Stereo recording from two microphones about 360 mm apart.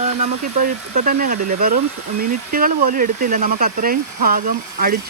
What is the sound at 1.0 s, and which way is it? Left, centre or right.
Speech, right.